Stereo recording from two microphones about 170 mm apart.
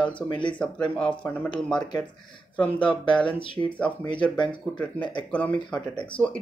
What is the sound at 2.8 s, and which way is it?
Speech, 30° left (ahead or behind).